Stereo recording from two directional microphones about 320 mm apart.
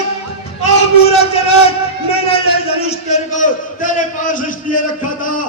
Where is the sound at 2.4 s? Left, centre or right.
Centre.